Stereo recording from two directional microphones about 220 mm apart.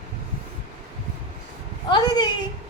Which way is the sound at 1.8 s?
20° left (ahead or behind).